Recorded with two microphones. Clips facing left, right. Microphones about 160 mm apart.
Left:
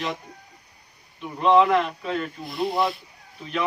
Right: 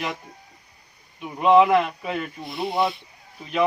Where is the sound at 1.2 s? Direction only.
10° right (ahead or behind).